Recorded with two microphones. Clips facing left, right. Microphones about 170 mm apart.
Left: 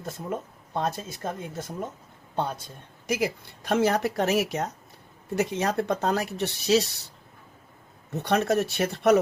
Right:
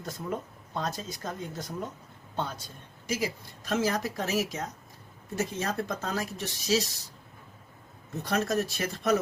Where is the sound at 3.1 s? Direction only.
65° left (ahead or behind).